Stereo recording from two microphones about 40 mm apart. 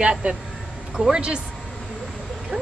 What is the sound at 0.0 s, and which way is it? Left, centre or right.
Speech, right.